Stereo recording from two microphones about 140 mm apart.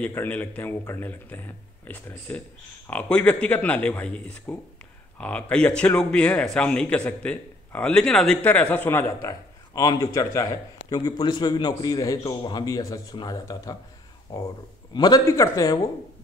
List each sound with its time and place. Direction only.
0.0 s speech: 15° left (ahead or behind)
9.2 s a man's voice: 25° left (ahead or behind)